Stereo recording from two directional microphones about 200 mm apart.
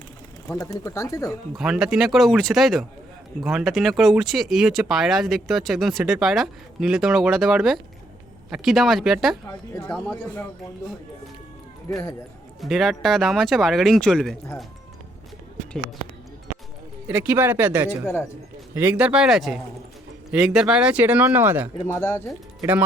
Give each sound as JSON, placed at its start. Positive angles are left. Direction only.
{"t": 0.4, "sound": "speech", "side_deg": 15}
{"t": 1.5, "sound": "speech", "side_deg": 0}
{"t": 9.5, "sound": "speech", "side_deg": 15}
{"t": 11.9, "sound": "speech", "side_deg": 15}
{"t": 12.5, "sound": "speech", "side_deg": 0}
{"t": 17.1, "sound": "speech", "side_deg": -10}
{"t": 18.0, "sound": "speech", "side_deg": 15}
{"t": 18.7, "sound": "speech", "side_deg": -10}
{"t": 21.8, "sound": "speech", "side_deg": 15}